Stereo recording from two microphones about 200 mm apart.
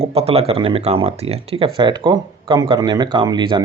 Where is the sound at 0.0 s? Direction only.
30° right (ahead or behind).